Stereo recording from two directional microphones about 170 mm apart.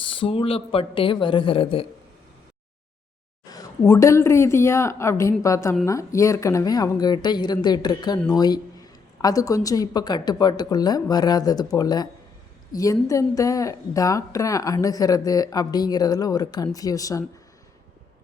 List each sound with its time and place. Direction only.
0.0 s speech: 30° left (ahead or behind)
3.5 s a woman's voice: 20° left (ahead or behind)